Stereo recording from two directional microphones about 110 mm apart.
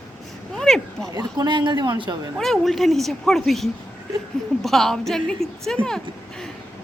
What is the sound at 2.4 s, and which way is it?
A woman's voice, centre (ahead or behind).